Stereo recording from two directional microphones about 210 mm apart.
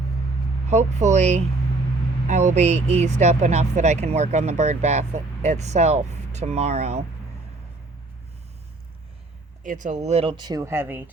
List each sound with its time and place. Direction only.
0.9 s speech: 35° right (ahead or behind)
9.6 s speech: 35° right (ahead or behind); by 11.1 s 10° right (ahead or behind)